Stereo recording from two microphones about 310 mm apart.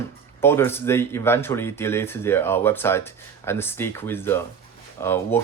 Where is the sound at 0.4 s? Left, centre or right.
Centre.